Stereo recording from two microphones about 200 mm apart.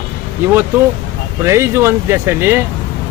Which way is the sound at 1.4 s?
15° right (ahead or behind).